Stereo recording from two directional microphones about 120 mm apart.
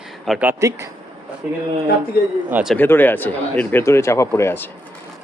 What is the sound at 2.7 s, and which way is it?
Speech, 15° left (ahead or behind).